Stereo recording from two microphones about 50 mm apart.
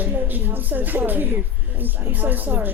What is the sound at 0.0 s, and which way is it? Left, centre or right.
Speech, right.